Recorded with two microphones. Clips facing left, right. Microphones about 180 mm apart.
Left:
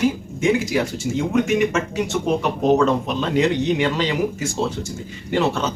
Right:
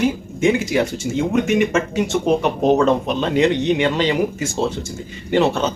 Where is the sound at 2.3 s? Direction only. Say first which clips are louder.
Right 3 dB; 25° right (ahead or behind).